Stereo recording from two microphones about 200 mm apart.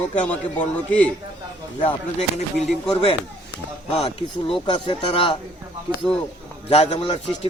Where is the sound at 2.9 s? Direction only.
30° left (ahead or behind).